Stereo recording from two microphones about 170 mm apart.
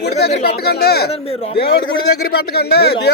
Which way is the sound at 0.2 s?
70° left (ahead or behind).